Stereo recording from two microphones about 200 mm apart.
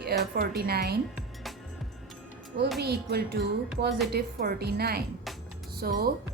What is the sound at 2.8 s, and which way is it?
A woman's voice, 50° right (ahead or behind).